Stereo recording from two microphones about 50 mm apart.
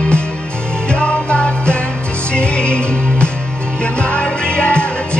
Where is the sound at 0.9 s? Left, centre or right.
Left.